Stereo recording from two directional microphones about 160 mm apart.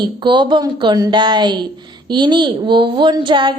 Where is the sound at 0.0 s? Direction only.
30° right (ahead or behind).